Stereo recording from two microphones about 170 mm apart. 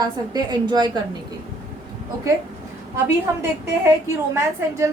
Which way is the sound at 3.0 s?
15° right (ahead or behind).